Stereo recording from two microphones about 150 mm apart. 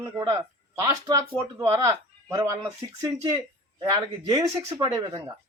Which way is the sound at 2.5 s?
20° right (ahead or behind).